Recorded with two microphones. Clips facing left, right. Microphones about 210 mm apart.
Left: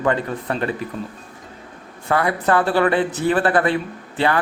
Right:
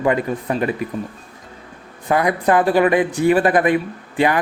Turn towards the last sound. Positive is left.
turn(degrees=-15)  # may be behind; listen again after turning